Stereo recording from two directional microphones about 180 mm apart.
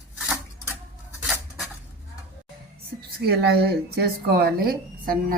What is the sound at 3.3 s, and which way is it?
A woman's voice, 65° right (ahead or behind).